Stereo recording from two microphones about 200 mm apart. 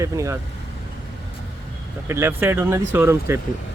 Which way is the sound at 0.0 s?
15° right (ahead or behind).